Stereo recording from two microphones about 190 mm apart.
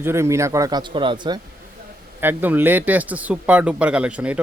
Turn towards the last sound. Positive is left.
turn(degrees=-5)  # may be behind; listen again after turning